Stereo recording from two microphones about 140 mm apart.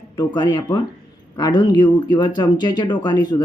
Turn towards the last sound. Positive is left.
turn(degrees=30)  # may be behind; listen again after turning